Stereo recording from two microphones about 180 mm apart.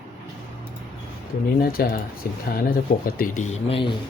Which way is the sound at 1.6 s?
55° left (ahead or behind).